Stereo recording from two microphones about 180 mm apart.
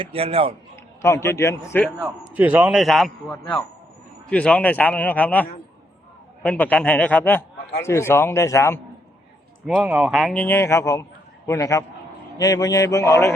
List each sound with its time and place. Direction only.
0.0 s a man's voice: 30° right (ahead or behind)
1.0 s a man's voice: 15° left (ahead or behind)
2.0 s a man's voice: 10° right (ahead or behind); by 8.8 s 15° left (ahead or behind)
9.6 s speech: 5° right (ahead or behind)
10.4 s a man's voice: 15° left (ahead or behind)